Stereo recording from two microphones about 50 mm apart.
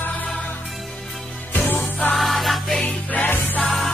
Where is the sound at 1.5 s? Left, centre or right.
Left.